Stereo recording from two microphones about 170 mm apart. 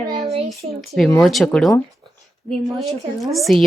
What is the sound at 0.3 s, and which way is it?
Speech, 40° right (ahead or behind).